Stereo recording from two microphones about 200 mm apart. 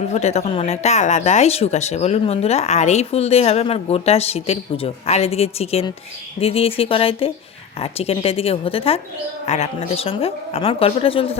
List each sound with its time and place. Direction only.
0.0 s a woman's voice: 35° left (ahead or behind)